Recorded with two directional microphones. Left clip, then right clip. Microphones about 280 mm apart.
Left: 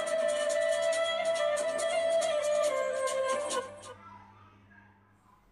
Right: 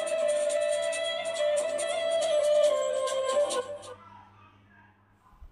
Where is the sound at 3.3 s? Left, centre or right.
Left.